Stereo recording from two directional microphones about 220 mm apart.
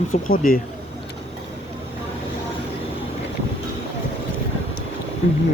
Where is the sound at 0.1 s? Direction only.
40° left (ahead or behind).